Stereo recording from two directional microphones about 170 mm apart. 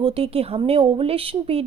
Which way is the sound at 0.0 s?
35° right (ahead or behind).